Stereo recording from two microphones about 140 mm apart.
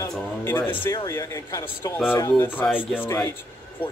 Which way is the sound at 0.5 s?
15° left (ahead or behind).